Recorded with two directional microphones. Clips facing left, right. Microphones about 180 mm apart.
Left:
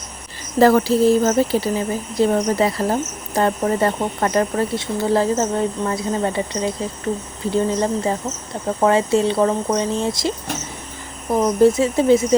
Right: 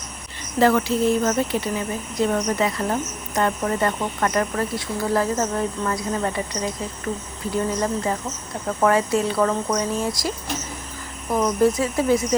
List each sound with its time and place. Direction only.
0.6 s speech: 35° left (ahead or behind)